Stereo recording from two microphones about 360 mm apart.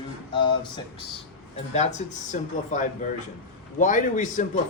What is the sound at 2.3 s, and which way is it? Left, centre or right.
A man's voice, left.